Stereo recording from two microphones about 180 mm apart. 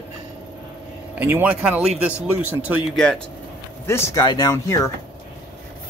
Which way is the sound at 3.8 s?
15° left (ahead or behind).